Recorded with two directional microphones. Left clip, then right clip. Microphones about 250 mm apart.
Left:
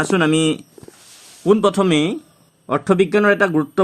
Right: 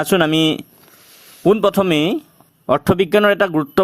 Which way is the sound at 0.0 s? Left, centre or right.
Right.